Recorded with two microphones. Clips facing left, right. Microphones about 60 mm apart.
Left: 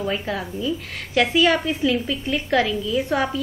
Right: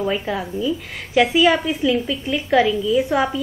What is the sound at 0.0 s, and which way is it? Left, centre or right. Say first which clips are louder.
A woman's voice: right 3 dB; centre.